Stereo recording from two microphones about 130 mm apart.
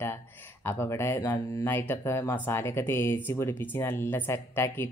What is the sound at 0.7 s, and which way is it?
Speech, 20° left (ahead or behind).